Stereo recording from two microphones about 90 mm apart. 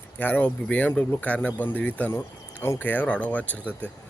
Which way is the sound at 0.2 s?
20° left (ahead or behind).